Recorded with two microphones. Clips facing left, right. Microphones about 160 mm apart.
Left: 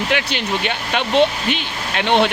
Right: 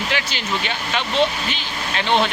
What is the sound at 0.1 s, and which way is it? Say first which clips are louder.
Speech: left 4 dB; 60° left (ahead or behind).